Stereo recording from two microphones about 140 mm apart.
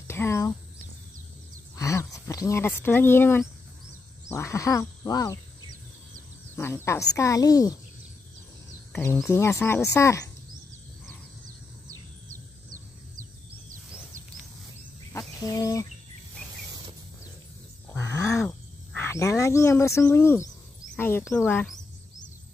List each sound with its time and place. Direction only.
0.1 s a woman's voice: 20° left (ahead or behind)
1.8 s a woman's voice: 20° left (ahead or behind)
6.5 s a woman's voice: 15° left (ahead or behind)
8.9 s a woman's voice: 15° left (ahead or behind)
15.1 s bird: 25° left (ahead or behind)
17.8 s a sound: 20° left (ahead or behind)
18.5 s speech: 20° left (ahead or behind)